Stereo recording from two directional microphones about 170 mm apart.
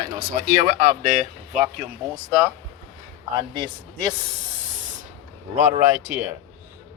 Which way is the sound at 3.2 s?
25° right (ahead or behind).